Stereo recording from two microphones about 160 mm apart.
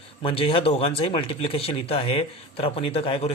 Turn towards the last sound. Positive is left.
turn(degrees=35)  # may be behind; listen again after turning